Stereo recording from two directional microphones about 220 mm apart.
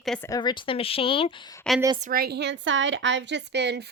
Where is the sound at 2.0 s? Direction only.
45° right (ahead or behind).